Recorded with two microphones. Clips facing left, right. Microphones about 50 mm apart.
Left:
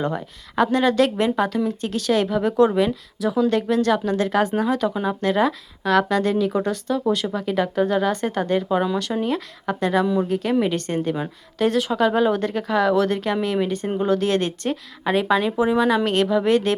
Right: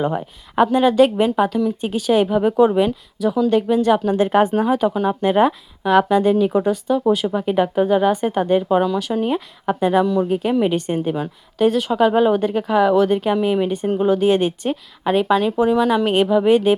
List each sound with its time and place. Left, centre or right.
0.0 s speech: centre
16.0 s speech: centre